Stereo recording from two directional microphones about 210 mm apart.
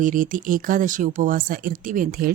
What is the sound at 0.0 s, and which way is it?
Speech, 40° right (ahead or behind).